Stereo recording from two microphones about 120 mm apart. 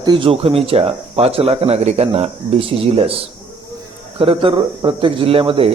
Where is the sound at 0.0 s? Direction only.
40° right (ahead or behind).